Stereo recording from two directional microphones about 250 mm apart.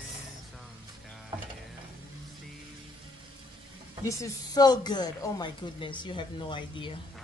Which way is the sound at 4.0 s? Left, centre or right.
Centre.